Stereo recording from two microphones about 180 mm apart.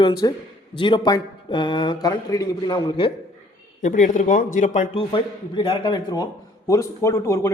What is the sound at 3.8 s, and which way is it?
Speech, 45° left (ahead or behind).